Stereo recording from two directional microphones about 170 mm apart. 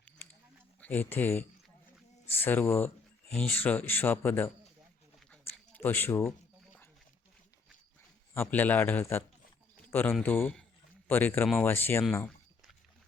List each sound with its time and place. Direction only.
0.8 s speech: 10° left (ahead or behind)
5.7 s speech: 10° left (ahead or behind)
8.3 s speech: 10° left (ahead or behind)